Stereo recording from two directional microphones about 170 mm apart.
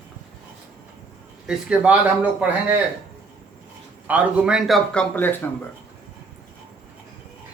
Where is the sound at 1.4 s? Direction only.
5° right (ahead or behind).